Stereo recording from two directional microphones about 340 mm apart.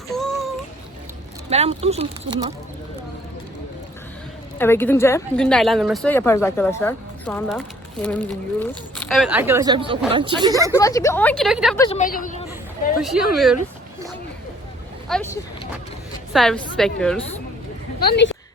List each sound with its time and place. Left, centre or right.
0.1 s child singing: centre
1.5 s speech: centre
4.5 s speech: centre
10.7 s speech: centre
11.8 s a woman's voice: centre
13.0 s speech: centre
15.1 s speech: centre
18.0 s a woman's voice: left